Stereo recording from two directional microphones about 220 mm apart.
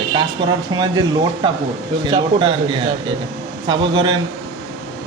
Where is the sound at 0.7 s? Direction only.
20° right (ahead or behind).